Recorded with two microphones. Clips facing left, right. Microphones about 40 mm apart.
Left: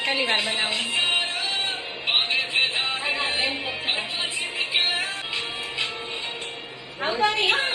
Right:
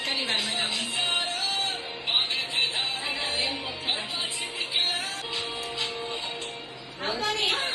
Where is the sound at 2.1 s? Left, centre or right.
Left.